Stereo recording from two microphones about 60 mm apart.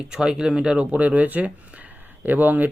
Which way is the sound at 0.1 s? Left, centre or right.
Centre.